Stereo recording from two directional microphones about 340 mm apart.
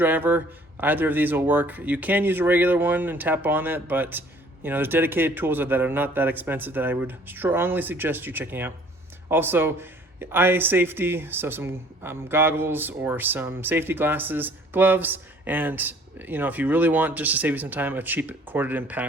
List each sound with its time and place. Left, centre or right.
0.0 s a man's voice: centre